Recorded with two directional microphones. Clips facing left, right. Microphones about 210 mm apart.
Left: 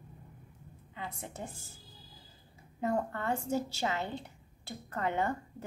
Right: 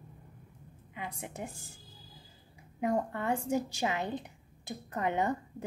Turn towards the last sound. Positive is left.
turn(degrees=-15)  # may be behind; listen again after turning